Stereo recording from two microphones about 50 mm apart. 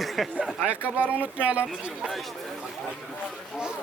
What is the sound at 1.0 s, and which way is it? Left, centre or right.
Speech, right.